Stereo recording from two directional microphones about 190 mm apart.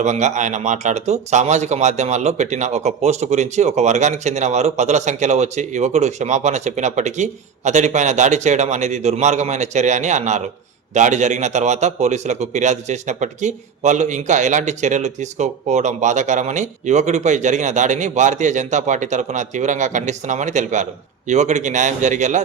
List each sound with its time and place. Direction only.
0.0 s a man's voice: 40° right (ahead or behind)